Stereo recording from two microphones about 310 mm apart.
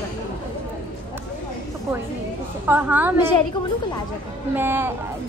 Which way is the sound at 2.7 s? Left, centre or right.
Centre.